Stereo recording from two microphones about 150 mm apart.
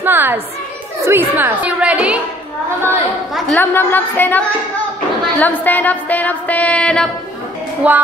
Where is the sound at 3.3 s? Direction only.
10° left (ahead or behind).